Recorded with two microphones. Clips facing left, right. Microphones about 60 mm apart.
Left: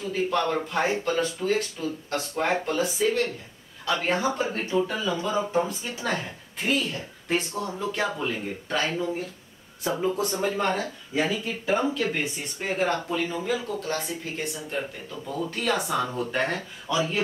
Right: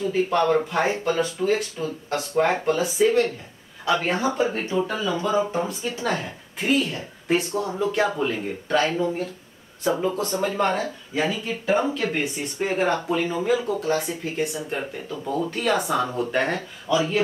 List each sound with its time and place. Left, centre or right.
0.3 s a woman's voice: centre
10.1 s speech: centre
10.5 s speech: centre
10.8 s speech: centre